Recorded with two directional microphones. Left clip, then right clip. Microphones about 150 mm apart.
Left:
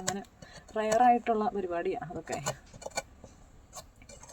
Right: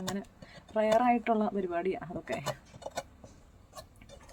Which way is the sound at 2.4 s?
50° left (ahead or behind).